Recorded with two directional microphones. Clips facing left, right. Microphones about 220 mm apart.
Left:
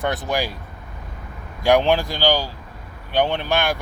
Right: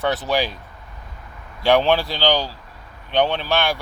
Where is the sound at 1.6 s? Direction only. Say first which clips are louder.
Even; 15° left (ahead or behind).